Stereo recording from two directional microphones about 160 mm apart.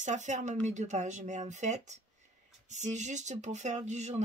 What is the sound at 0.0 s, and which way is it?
Speech, 50° right (ahead or behind).